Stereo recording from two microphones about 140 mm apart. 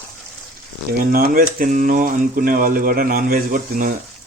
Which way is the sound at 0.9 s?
90° right.